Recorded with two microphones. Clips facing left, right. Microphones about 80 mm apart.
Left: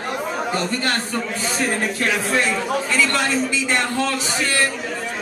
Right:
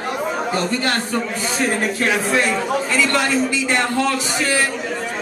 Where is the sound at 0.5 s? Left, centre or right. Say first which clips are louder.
Right 1 dB; centre.